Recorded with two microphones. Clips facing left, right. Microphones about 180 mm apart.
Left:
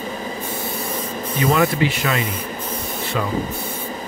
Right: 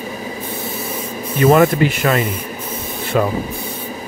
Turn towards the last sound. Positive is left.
turn(degrees=-55)  # may be behind; listen again after turning